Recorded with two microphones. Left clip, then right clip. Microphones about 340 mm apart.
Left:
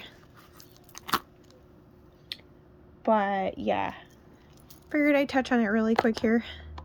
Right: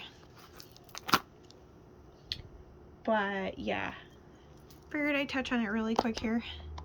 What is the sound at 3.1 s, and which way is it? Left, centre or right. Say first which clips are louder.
Speech: left 6 dB; centre.